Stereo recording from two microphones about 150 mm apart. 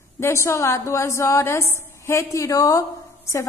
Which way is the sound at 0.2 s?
20° left (ahead or behind).